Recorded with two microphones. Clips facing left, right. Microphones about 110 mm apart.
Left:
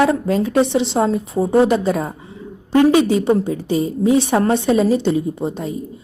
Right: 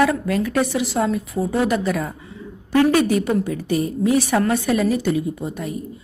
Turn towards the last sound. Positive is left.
turn(degrees=25)  # may be behind; listen again after turning